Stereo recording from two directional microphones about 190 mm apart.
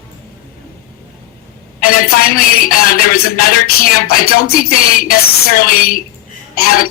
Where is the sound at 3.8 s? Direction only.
50° left (ahead or behind).